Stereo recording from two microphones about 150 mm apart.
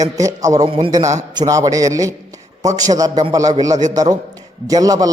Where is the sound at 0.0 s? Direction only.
20° right (ahead or behind).